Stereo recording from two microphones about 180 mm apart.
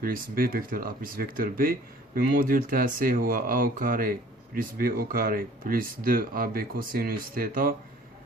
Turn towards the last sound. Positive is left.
turn(degrees=-50)  # may be behind; listen again after turning